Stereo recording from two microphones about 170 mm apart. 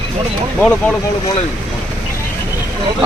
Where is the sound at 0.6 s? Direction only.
5° left (ahead or behind).